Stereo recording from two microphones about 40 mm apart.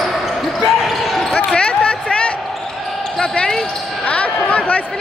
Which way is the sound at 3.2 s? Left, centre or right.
Centre.